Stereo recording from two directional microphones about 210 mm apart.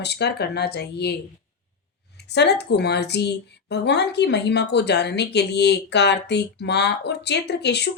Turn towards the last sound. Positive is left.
turn(degrees=55)  # may be behind; listen again after turning